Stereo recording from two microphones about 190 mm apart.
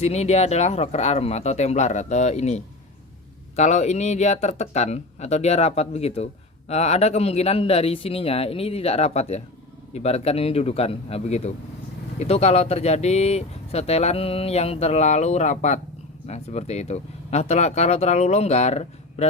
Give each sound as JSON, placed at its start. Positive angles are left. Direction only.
{"t": 0.0, "sound": "speech", "side_deg": 35}